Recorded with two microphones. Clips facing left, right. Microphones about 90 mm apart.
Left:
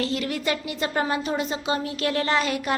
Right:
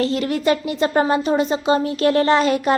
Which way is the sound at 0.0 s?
35° right (ahead or behind).